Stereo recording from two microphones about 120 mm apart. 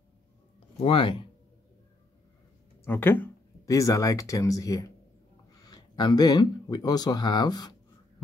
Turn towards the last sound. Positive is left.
turn(degrees=35)  # may be behind; listen again after turning